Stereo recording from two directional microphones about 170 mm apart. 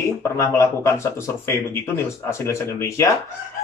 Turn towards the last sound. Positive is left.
turn(degrees=15)  # may be behind; listen again after turning